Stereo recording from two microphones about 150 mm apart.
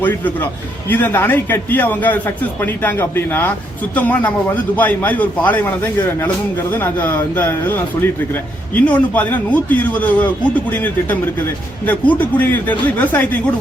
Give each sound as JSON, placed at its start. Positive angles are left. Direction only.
{"t": 0.0, "sound": "a man's voice", "side_deg": 10}